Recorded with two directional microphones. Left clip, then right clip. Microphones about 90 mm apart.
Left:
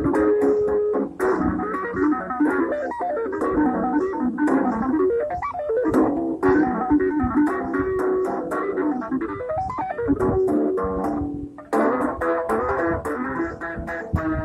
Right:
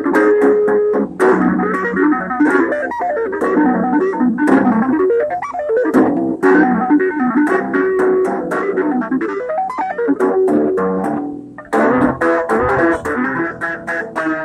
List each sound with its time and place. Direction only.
0.0 s music: 35° right (ahead or behind)
10.0 s music: 35° right (ahead or behind)